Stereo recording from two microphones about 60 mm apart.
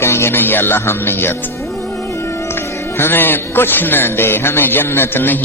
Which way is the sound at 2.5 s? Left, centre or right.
Left.